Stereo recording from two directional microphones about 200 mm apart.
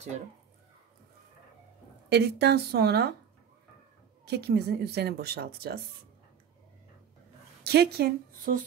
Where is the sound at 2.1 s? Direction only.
55° right (ahead or behind).